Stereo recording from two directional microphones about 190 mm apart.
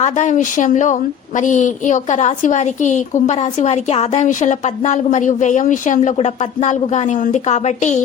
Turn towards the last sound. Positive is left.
turn(degrees=35)  # may be behind; listen again after turning